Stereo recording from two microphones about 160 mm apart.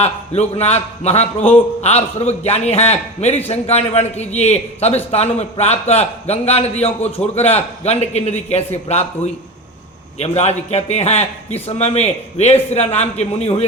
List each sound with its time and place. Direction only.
0.0 s a man's voice: 40° left (ahead or behind)